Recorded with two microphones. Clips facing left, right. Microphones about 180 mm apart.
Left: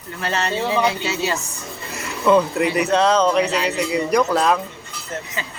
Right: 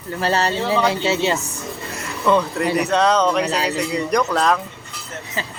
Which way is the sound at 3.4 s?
40° right (ahead or behind).